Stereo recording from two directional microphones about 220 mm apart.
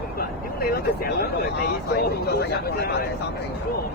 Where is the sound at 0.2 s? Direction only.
45° left (ahead or behind).